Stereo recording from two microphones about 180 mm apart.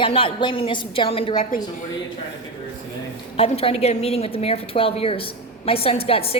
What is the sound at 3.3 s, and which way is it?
A woman's voice, 35° left (ahead or behind).